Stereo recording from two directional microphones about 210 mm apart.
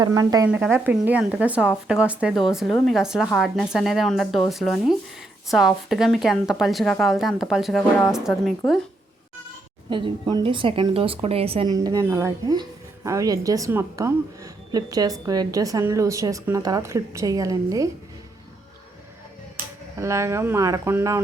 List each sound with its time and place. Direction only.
0.0 s a woman's voice: 15° right (ahead or behind); by 8.8 s centre (ahead or behind)
9.9 s speech: 20° right (ahead or behind)
20.0 s speech: 15° right (ahead or behind)